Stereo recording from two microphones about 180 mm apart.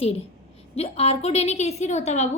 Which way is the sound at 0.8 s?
35° left (ahead or behind).